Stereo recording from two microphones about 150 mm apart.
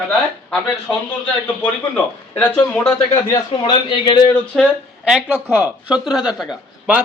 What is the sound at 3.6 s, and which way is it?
Speech, 35° left (ahead or behind).